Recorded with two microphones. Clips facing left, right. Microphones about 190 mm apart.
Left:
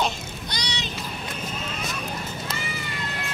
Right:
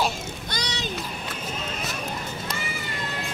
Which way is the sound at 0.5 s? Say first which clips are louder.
Right 2 dB; 50° right (ahead or behind).